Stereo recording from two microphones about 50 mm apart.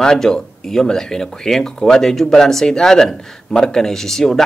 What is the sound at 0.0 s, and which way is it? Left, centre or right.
Speech, centre.